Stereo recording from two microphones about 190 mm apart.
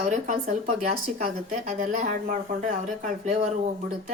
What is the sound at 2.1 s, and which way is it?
Speech, 45° right (ahead or behind).